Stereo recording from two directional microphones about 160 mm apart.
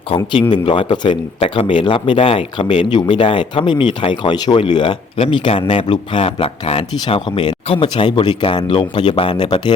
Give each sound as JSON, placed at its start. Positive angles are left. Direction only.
{"t": 0.5, "sound": "a man's voice", "side_deg": 30}